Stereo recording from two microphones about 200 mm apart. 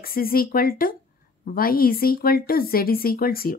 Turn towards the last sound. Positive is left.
turn(degrees=50)  # may be behind; listen again after turning